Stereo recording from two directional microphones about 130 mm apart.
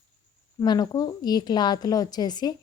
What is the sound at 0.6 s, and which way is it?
A woman's voice, 30° left (ahead or behind).